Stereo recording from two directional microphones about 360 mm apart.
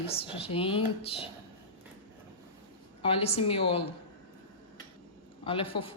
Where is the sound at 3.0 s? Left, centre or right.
Centre.